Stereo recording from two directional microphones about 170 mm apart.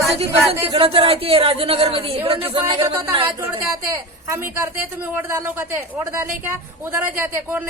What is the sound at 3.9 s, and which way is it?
A woman's voice, 15° right (ahead or behind).